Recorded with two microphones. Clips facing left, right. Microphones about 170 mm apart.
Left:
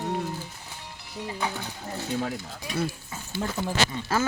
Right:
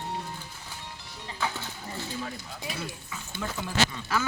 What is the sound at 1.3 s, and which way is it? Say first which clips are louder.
Speech: left 1 dB; 15° left (ahead or behind).